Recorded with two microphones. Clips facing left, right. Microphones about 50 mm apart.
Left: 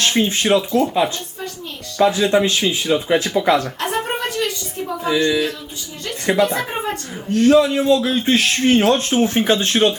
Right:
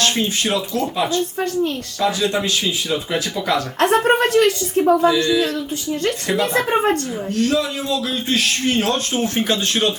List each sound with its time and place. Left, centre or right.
0.0 s speech: left
3.8 s a woman's voice: right
5.0 s speech: centre
6.5 s a woman's voice: right
7.3 s speech: left